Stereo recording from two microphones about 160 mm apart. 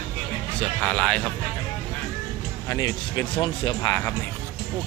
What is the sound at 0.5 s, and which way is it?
Speech, 5° left (ahead or behind).